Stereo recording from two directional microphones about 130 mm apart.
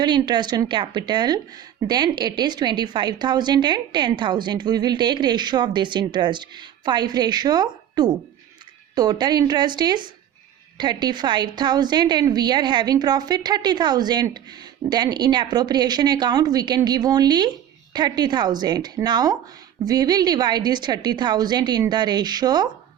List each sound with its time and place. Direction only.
0.0 s a woman's voice: 35° right (ahead or behind)